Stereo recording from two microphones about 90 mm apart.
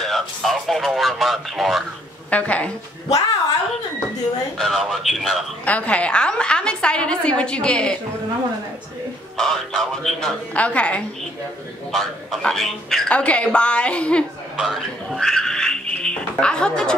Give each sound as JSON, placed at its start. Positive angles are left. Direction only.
{"t": 0.0, "sound": "speech", "side_deg": 0}
{"t": 2.3, "sound": "a woman's voice", "side_deg": 15}
{"t": 4.6, "sound": "a man's voice", "side_deg": 5}
{"t": 5.7, "sound": "a woman's voice", "side_deg": 15}
{"t": 9.4, "sound": "a man's voice", "side_deg": 5}
{"t": 11.9, "sound": "a man's voice", "side_deg": 5}
{"t": 14.6, "sound": "speech", "side_deg": 0}